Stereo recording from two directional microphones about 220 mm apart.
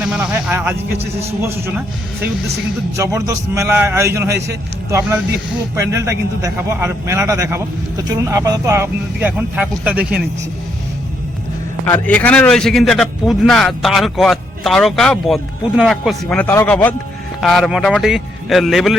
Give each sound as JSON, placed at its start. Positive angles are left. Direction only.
{"t": 0.0, "sound": "a sound", "side_deg": -5}
{"t": 1.5, "sound": "a man's voice", "side_deg": -10}
{"t": 2.9, "sound": "a man's voice", "side_deg": -15}
{"t": 11.9, "sound": "a man's voice", "side_deg": 5}